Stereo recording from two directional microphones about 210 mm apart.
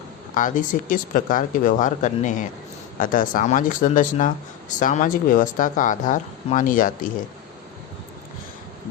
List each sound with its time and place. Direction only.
0.3 s speech: 40° left (ahead or behind)